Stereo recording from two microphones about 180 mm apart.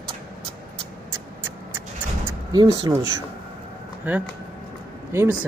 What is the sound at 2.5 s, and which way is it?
Speech, 20° right (ahead or behind).